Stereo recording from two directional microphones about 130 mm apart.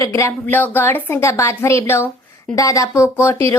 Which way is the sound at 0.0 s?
20° left (ahead or behind).